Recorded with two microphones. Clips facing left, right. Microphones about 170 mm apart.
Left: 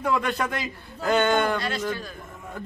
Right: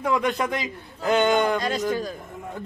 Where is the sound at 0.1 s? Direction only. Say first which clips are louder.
Right 3 dB; 15° right (ahead or behind).